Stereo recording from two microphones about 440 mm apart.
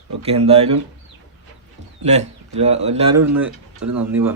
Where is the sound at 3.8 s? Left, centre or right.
Right.